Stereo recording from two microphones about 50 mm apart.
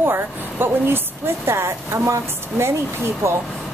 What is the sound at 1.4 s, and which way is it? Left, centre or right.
A woman's voice, right.